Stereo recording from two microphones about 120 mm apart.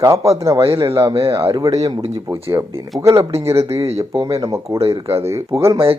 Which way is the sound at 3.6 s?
55° right (ahead or behind).